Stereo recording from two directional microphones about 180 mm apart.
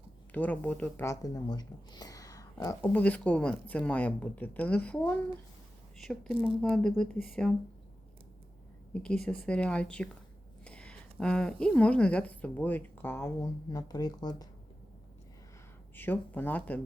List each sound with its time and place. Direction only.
0.3 s speech: 10° left (ahead or behind)
2.8 s a woman's voice: 10° left (ahead or behind)
8.9 s a woman's voice: 5° left (ahead or behind)
10.6 s a sound: 5° left (ahead or behind)
11.6 s a woman's voice: 5° left (ahead or behind); by 14.4 s 20° left (ahead or behind)
16.0 s a woman's voice: 10° left (ahead or behind)